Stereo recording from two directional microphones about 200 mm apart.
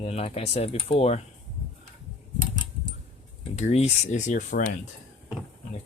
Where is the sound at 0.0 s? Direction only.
30° left (ahead or behind).